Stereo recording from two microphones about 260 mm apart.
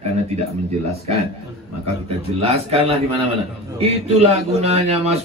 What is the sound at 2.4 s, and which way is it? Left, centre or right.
A man's voice, right.